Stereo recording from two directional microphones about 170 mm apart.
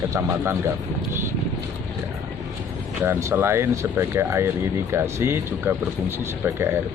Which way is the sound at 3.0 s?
15° right (ahead or behind).